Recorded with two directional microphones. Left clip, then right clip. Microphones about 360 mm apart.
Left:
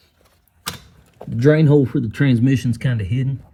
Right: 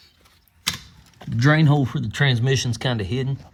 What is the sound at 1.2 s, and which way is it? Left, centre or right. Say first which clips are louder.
Speech: left 4 dB; centre.